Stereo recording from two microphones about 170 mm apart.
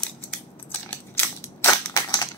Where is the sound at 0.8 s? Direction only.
15° left (ahead or behind).